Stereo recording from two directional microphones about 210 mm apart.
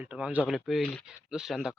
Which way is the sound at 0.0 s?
5° right (ahead or behind).